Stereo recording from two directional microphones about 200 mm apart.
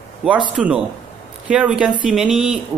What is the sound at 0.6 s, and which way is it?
Speech, centre (ahead or behind).